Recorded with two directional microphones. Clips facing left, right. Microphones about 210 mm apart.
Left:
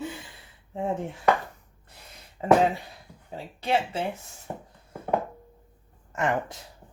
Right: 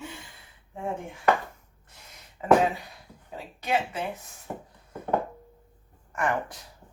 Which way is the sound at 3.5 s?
30° left (ahead or behind).